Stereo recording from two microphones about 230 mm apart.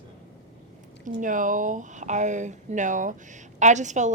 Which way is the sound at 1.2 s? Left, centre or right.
Right.